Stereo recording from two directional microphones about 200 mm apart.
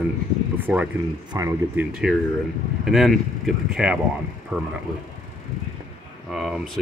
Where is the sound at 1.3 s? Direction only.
15° right (ahead or behind).